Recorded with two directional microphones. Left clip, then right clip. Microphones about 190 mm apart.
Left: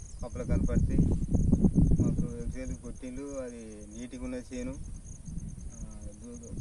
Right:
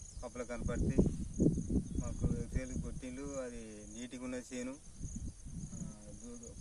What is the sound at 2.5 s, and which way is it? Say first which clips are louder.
Speech: left 3 dB; centre (ahead or behind).